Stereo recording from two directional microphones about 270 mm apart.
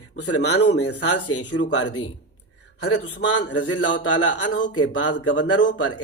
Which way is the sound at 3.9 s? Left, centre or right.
Left.